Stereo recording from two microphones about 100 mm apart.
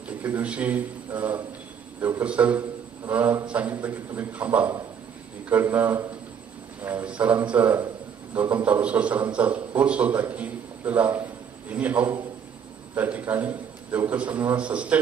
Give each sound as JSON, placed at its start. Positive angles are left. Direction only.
{"t": 0.2, "sound": "a man's voice", "side_deg": -15}